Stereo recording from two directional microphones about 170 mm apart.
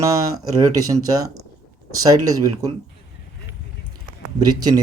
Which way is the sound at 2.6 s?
20° right (ahead or behind).